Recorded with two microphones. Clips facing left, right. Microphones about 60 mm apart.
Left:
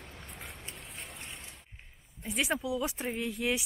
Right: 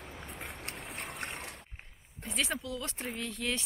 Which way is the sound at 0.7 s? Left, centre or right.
Right.